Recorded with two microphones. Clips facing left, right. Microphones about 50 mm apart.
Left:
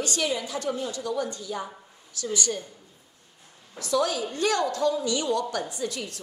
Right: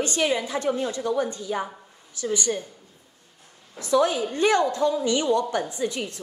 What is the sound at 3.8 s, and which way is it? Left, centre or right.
Speech, right.